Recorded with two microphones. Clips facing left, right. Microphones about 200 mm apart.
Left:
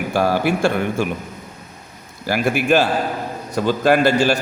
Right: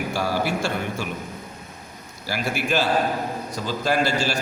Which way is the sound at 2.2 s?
55° left (ahead or behind).